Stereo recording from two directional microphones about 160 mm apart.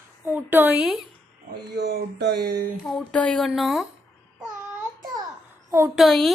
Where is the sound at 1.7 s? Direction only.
75° right (ahead or behind).